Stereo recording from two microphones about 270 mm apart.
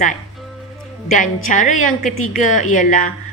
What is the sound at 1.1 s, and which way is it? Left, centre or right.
A woman's voice, left.